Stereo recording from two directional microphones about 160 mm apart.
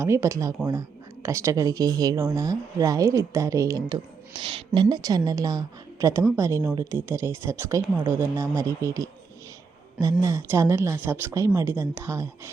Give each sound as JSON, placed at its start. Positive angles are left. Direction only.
{"t": 0.0, "sound": "a woman's voice", "side_deg": -20}